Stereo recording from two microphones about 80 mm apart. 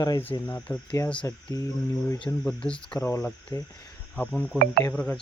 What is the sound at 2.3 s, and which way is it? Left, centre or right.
Speech, left.